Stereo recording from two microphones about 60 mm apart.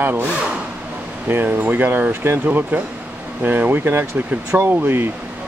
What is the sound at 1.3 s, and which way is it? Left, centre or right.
Speech, right.